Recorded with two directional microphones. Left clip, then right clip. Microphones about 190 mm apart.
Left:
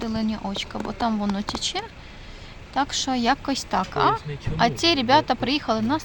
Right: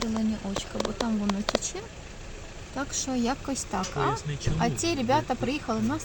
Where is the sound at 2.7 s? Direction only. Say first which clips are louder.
Left 8 dB; 20° left (ahead or behind).